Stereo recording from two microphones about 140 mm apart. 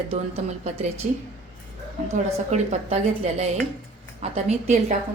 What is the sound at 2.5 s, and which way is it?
A woman's voice, 50° right (ahead or behind).